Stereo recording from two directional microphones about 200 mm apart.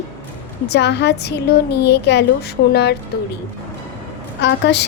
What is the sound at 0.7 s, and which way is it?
A woman's voice, 60° left (ahead or behind).